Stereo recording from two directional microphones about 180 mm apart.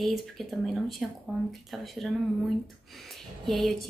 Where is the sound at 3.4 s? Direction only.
Centre (ahead or behind).